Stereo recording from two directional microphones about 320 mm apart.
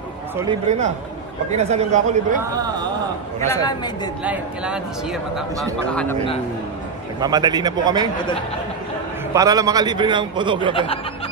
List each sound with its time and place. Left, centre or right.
0.4 s speech: centre
3.3 s speech: centre
4.2 s a man's voice: centre
7.2 s a man's voice: centre
9.3 s a man's voice: centre
10.7 s speech: centre